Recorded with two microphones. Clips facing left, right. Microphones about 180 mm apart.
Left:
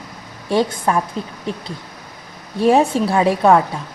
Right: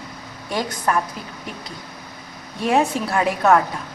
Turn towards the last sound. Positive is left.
turn(degrees=30)  # may be behind; listen again after turning